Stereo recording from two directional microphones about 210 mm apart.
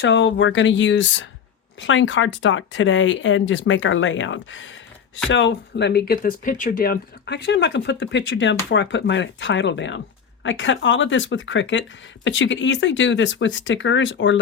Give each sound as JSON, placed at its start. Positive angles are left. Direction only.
{"t": 0.0, "sound": "speech", "side_deg": 60}